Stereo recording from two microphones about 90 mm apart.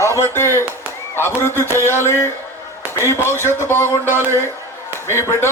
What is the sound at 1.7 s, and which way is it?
Speech, 25° left (ahead or behind).